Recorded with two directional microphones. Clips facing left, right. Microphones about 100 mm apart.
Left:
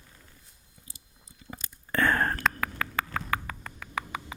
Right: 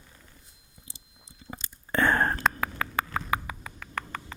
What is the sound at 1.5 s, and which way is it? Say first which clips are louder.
Whispering: right 2 dB; 25° right (ahead or behind).